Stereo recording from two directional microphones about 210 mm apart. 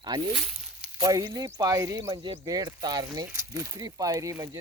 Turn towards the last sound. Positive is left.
turn(degrees=-15)  # may be behind; listen again after turning